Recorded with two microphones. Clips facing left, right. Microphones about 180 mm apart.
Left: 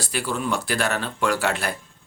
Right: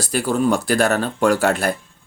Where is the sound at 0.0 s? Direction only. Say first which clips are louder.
Right 8 dB; 45° right (ahead or behind).